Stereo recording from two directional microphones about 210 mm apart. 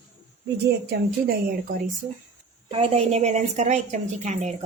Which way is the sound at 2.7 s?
30° right (ahead or behind).